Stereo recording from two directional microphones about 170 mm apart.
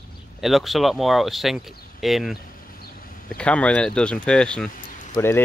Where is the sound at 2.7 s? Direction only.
55° left (ahead or behind).